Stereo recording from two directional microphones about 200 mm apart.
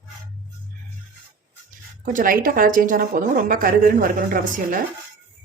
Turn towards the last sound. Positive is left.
turn(degrees=-45)  # may be behind; listen again after turning